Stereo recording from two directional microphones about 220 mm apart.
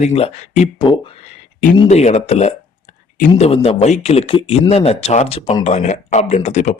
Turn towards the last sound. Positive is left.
turn(degrees=30)  # may be behind; listen again after turning